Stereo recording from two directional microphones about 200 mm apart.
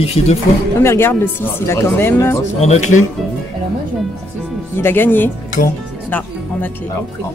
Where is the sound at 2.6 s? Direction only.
35° left (ahead or behind).